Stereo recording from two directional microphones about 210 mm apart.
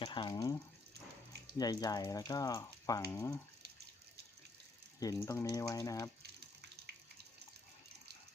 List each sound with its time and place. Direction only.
0.0 s speech: 20° left (ahead or behind)
1.5 s speech: 20° left (ahead or behind)
4.9 s speech: 15° left (ahead or behind)